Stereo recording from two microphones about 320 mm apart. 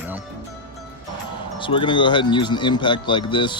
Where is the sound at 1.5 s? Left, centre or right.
Centre.